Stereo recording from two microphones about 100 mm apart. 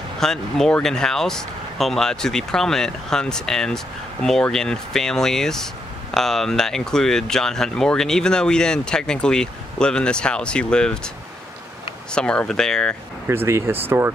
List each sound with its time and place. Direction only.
0.2 s speech: 5° left (ahead or behind)
12.1 s speech: 10° left (ahead or behind)
13.3 s speech: 25° right (ahead or behind)